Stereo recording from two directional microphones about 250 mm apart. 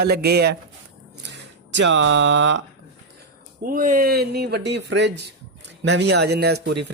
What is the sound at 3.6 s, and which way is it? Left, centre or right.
Speech, right.